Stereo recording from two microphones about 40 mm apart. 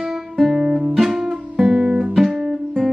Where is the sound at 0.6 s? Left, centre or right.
Centre.